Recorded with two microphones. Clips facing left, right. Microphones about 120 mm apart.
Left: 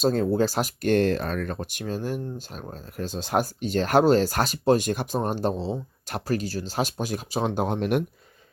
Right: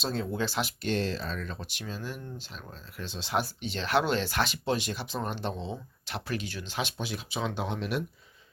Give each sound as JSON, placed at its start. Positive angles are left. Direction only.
{"t": 0.0, "sound": "speech", "side_deg": 45}